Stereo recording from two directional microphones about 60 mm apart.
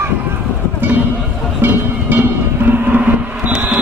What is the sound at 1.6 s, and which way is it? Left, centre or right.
Music, right.